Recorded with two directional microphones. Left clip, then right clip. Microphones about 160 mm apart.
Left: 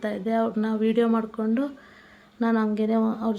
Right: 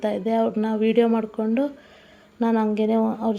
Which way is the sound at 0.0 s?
15° right (ahead or behind).